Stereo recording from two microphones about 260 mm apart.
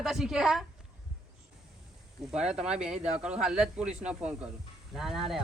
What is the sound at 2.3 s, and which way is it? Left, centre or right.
Speech, centre.